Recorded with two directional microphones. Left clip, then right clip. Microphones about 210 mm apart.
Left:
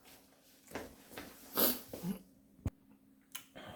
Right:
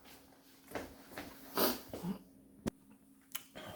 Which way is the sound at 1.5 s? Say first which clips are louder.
Right 1 dB; 25° left (ahead or behind).